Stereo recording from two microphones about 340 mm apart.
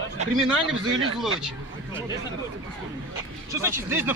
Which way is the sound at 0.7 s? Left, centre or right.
Right.